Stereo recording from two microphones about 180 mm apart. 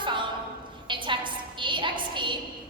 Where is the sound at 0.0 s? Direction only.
25° right (ahead or behind).